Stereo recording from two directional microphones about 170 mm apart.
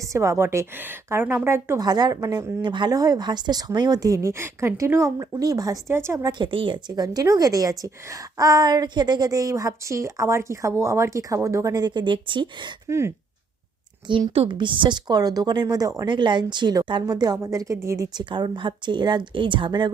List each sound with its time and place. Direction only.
0.1 s a woman's voice: 15° right (ahead or behind)
6.4 s a woman's voice: 30° right (ahead or behind)
12.9 s speech: 15° right (ahead or behind)
14.1 s a woman's voice: 30° right (ahead or behind)